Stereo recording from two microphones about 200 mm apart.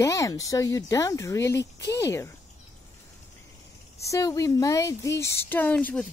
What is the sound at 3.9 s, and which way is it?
Speech, 15° left (ahead or behind).